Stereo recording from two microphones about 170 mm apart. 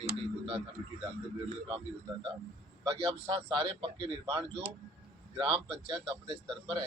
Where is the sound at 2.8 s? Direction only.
30° right (ahead or behind).